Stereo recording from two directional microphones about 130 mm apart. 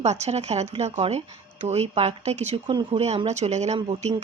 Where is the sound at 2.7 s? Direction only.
45° right (ahead or behind); by 3.7 s 60° right (ahead or behind).